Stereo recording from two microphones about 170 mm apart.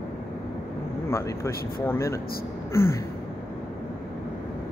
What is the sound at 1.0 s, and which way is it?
Speech, 15° left (ahead or behind).